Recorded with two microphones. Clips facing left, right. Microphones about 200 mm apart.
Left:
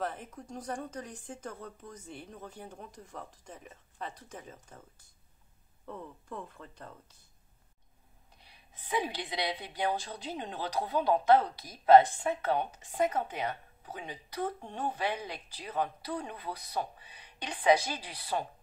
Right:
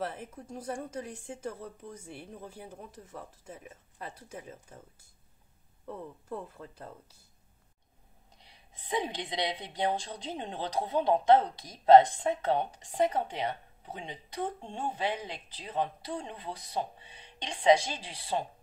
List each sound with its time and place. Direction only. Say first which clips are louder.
0.0 s speech: even; 5° right (ahead or behind)
8.5 s speech: right 1 dB; 25° right (ahead or behind)